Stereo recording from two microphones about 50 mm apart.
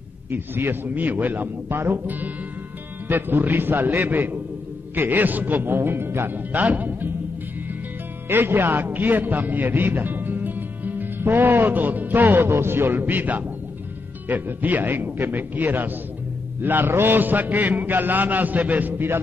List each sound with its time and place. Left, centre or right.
0.3 s a man's voice: right
8.3 s a man's voice: right
12.4 s a man's voice: right